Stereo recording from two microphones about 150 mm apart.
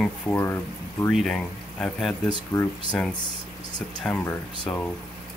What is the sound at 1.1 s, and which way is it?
Speech, 5° left (ahead or behind).